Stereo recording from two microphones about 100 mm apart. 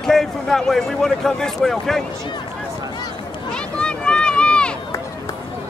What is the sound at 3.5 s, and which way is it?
Run, 10° left (ahead or behind).